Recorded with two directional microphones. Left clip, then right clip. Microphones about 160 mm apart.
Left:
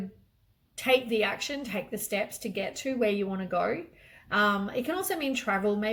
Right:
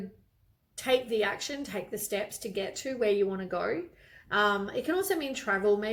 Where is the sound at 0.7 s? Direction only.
20° right (ahead or behind).